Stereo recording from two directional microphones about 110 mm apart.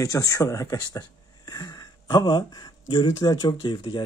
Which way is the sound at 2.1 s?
45° left (ahead or behind).